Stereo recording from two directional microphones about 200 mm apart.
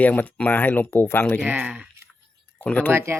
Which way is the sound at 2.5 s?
10° left (ahead or behind).